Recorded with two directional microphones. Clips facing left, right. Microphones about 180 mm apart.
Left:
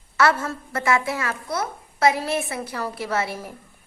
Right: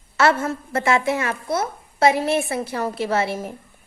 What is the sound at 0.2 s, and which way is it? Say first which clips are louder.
Speech: right 2 dB; 25° right (ahead or behind).